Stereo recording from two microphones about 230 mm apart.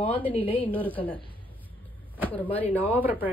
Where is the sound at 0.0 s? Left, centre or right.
Centre.